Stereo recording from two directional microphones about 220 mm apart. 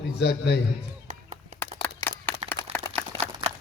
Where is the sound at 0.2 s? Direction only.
50° left (ahead or behind).